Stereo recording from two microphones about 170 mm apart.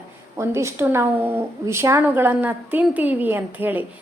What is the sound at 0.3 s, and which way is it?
A woman's voice, 15° right (ahead or behind).